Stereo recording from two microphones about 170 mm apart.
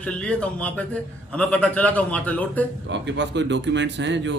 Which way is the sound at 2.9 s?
90° right.